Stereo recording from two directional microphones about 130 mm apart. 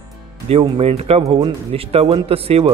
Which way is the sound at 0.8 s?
55° right (ahead or behind).